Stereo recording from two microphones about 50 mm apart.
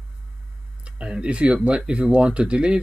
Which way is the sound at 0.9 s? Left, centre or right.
Centre.